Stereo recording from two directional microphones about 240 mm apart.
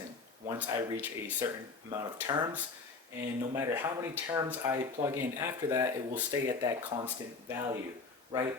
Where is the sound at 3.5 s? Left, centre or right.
Centre.